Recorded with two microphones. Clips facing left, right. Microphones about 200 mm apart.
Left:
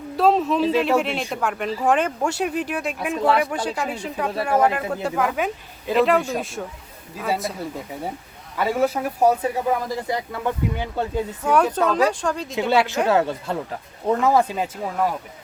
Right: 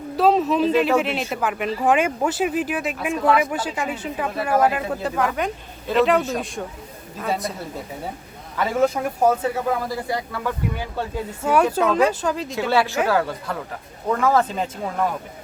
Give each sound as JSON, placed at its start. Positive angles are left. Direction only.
{"t": 0.2, "sound": "a woman's voice", "side_deg": 0}
{"t": 8.5, "sound": "speech", "side_deg": 10}
{"t": 10.1, "sound": "speech", "side_deg": 20}
{"t": 11.4, "sound": "a woman's voice", "side_deg": -5}
{"t": 12.5, "sound": "speech", "side_deg": 20}